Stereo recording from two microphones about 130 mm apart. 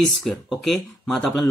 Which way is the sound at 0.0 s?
Centre (ahead or behind).